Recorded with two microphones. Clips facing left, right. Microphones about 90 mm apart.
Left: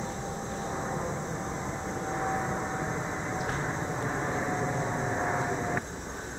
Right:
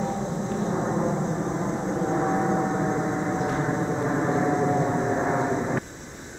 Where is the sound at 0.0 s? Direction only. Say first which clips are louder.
Right 7 dB; 25° right (ahead or behind).